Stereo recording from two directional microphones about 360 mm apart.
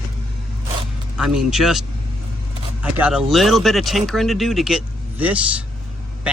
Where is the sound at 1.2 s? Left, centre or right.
Centre.